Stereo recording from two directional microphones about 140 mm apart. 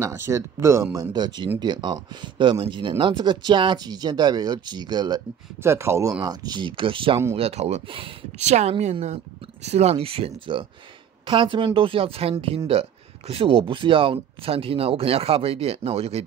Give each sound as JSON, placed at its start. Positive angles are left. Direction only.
{"t": 0.0, "sound": "speech", "side_deg": -20}
{"t": 1.1, "sound": "speech", "side_deg": -30}
{"t": 5.6, "sound": "speech", "side_deg": -20}